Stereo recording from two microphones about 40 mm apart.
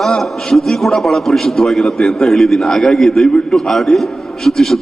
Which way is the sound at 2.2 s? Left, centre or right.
Centre.